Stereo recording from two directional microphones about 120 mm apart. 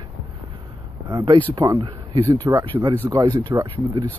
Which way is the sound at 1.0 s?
40° right (ahead or behind).